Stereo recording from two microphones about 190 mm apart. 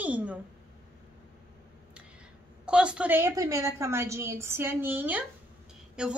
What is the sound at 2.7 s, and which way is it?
A woman's voice, 5° right (ahead or behind).